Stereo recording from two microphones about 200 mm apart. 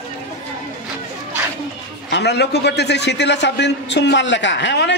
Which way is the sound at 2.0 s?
60° left (ahead or behind).